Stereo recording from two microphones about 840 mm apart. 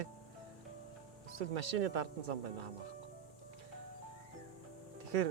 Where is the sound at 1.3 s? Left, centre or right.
Right.